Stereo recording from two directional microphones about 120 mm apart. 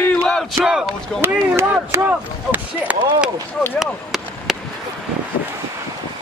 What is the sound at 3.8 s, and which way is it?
Chop, 5° right (ahead or behind).